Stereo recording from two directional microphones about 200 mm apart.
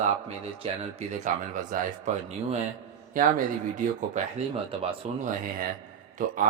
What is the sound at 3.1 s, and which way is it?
Speech, 45° right (ahead or behind).